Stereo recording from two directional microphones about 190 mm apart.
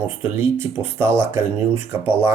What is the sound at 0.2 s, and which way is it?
Speech, 10° right (ahead or behind).